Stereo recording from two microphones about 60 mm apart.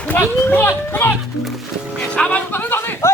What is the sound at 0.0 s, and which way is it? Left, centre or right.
Speech, left.